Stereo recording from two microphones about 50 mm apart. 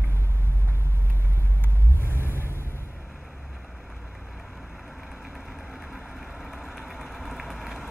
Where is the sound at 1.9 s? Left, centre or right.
Left.